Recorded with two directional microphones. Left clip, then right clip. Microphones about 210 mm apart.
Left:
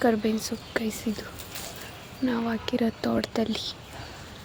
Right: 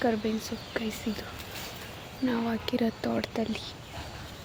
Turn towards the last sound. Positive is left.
turn(degrees=20)  # may be behind; listen again after turning